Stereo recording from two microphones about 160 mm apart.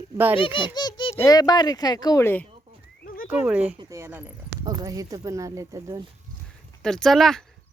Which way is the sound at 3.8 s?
20° right (ahead or behind).